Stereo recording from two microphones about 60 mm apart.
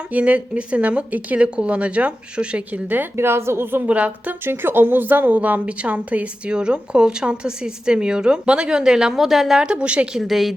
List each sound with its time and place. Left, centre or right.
0.1 s speech: right
3.2 s a woman's voice: right
3.8 s speech: right
4.4 s a woman's voice: right; by 9.6 s centre
9.6 s a woman's voice: centre
10.2 s a woman's voice: centre